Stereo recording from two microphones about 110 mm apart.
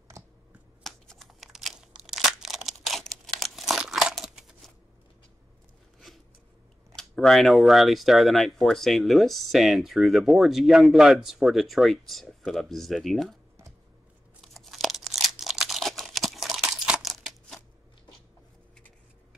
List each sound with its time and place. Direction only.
0.2 s finger snapping: 30° right (ahead or behind)
0.8 s crumpling: centre (ahead or behind)
7.0 s speech: centre (ahead or behind)
14.4 s crumpling: centre (ahead or behind)